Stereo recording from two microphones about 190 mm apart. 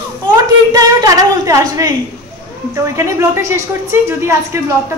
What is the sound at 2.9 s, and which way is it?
Speech, 15° right (ahead or behind).